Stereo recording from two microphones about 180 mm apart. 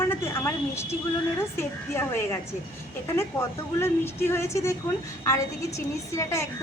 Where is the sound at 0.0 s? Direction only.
15° left (ahead or behind).